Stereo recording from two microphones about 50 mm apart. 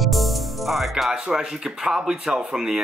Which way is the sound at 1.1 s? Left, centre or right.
Centre.